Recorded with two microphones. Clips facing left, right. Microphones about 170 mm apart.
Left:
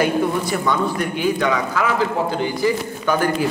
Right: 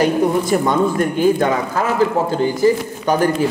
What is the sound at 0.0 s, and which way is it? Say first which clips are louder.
Speech: right 3 dB; 45° right (ahead or behind).